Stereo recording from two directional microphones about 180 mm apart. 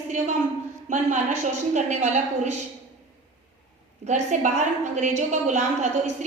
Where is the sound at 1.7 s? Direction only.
40° right (ahead or behind).